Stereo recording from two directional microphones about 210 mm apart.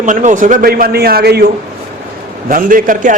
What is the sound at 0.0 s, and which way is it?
A man's voice, 35° right (ahead or behind).